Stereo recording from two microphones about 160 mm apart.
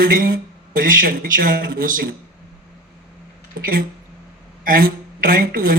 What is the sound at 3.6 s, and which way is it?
A woman's voice, 60° right (ahead or behind).